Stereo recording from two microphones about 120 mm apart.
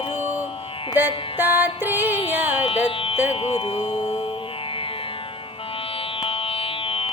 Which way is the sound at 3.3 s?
55° left (ahead or behind).